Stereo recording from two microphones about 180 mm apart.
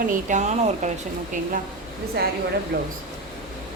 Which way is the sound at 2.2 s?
60° right (ahead or behind).